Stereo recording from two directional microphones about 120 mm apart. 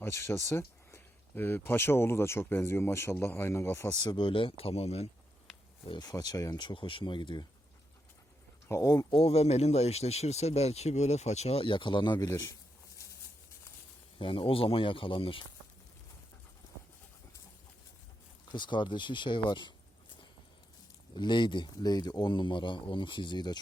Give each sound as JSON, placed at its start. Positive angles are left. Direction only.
{"t": 0.0, "sound": "speech", "side_deg": 25}
{"t": 4.2, "sound": "speech", "side_deg": 45}
{"t": 5.9, "sound": "speech", "side_deg": 30}
{"t": 8.6, "sound": "speech", "side_deg": 25}
{"t": 9.0, "sound": "speech", "side_deg": 50}
{"t": 12.3, "sound": "speech", "side_deg": 25}
{"t": 14.2, "sound": "speech", "side_deg": 50}
{"t": 18.5, "sound": "speech", "side_deg": 40}
{"t": 21.2, "sound": "speech", "side_deg": 40}